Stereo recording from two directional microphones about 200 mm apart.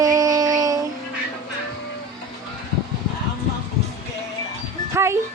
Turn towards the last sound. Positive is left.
turn(degrees=-15)  # may be behind; listen again after turning